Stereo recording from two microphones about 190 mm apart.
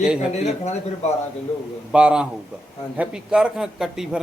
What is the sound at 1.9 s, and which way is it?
Speech, 5° right (ahead or behind).